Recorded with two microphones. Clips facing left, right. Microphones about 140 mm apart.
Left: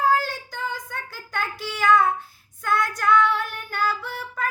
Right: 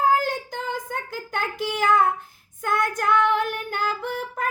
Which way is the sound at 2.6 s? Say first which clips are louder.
Even; 50° right (ahead or behind).